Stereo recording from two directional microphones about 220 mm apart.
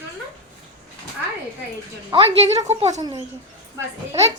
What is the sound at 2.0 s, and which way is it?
Speech, 25° right (ahead or behind).